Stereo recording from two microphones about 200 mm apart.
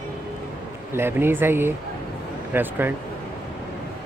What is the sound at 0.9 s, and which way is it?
Speech, 10° right (ahead or behind).